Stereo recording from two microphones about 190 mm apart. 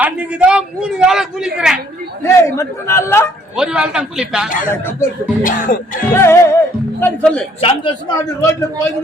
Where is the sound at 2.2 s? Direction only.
15° left (ahead or behind).